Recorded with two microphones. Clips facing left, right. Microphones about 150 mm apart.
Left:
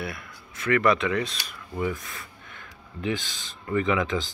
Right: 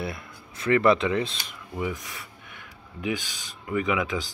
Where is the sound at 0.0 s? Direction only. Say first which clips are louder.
Right 1 dB; 25° right (ahead or behind).